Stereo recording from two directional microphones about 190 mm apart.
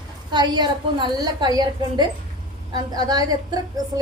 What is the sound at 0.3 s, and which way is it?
A woman's voice, 20° right (ahead or behind).